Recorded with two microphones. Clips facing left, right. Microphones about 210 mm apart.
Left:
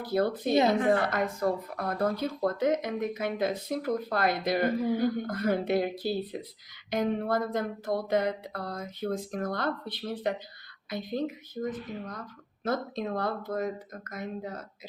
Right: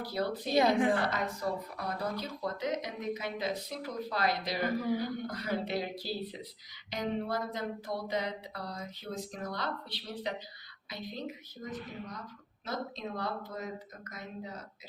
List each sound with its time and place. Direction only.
0.0 s a woman's voice: 50° left (ahead or behind)